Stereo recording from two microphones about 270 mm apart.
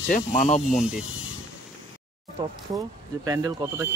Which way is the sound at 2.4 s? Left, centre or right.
Centre.